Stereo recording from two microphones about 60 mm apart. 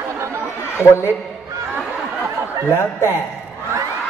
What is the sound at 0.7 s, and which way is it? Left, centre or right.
Speech, left.